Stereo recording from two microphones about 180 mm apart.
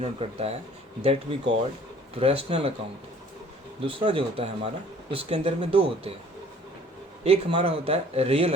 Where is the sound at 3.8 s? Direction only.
30° right (ahead or behind).